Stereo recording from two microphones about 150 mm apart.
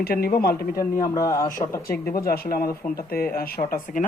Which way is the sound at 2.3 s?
75° left (ahead or behind).